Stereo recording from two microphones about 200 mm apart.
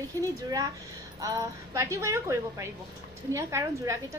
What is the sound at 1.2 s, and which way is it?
A woman's voice, 15° right (ahead or behind).